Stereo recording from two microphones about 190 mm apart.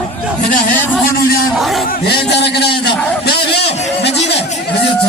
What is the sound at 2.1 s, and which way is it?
Speech, 60° left (ahead or behind).